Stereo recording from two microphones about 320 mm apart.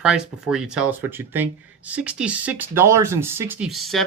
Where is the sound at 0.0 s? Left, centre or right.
Centre.